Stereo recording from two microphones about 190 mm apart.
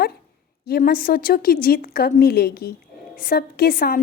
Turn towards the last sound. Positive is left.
turn(degrees=50)  # may be behind; listen again after turning